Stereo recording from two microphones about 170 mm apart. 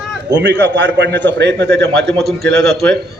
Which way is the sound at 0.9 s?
90° right.